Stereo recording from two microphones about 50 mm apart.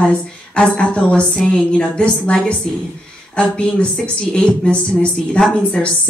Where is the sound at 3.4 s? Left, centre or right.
Centre.